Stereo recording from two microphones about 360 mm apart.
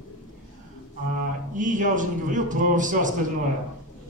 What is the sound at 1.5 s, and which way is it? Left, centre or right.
A man's voice, right.